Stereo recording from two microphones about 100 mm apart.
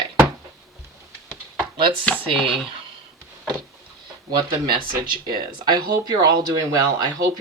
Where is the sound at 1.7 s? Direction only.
55° right (ahead or behind).